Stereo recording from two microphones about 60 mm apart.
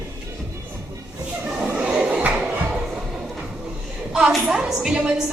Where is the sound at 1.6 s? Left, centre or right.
Centre.